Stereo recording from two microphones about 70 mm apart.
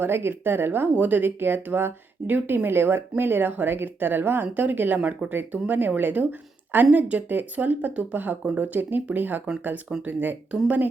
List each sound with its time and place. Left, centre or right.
0.0 s speech: right